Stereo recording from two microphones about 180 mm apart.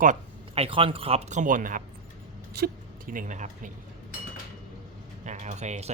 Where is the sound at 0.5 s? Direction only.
30° right (ahead or behind).